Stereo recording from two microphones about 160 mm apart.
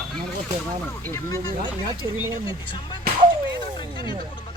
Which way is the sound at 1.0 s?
20° left (ahead or behind).